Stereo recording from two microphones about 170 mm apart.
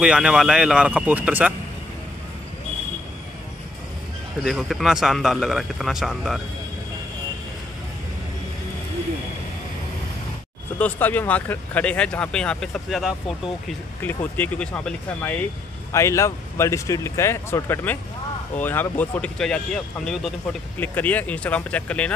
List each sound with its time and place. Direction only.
0.0 s speech: 5° right (ahead or behind)
4.4 s a man's voice: centre (ahead or behind)
10.8 s speech: 10° left (ahead or behind)